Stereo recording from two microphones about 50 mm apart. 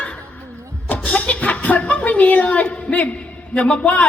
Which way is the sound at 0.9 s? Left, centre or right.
Left.